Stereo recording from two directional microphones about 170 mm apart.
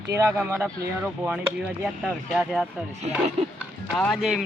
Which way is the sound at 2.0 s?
Centre (ahead or behind).